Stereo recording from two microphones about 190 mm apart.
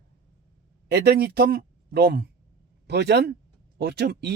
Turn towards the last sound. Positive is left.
turn(degrees=-60)  # may be behind; listen again after turning